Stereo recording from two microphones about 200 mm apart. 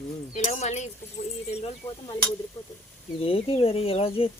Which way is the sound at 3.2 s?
30° left (ahead or behind).